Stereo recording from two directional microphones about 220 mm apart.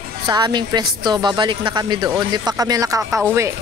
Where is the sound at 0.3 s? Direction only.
20° right (ahead or behind).